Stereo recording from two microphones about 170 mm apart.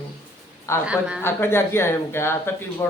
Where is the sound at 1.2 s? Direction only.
15° left (ahead or behind).